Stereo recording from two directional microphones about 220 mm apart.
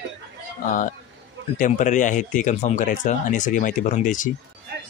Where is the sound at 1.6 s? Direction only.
35° left (ahead or behind).